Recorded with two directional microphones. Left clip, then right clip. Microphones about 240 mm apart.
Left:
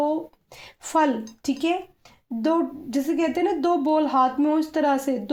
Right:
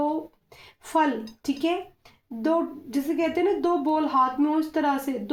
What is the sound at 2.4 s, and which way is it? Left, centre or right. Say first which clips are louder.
A woman's voice: left 1 dB; left.